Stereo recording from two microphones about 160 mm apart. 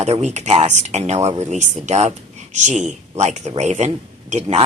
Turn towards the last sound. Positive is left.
turn(degrees=-45)  # may be behind; listen again after turning